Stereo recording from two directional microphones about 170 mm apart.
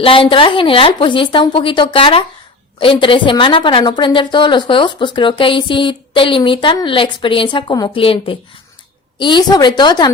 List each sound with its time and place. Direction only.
0.0 s a woman's voice: 30° left (ahead or behind)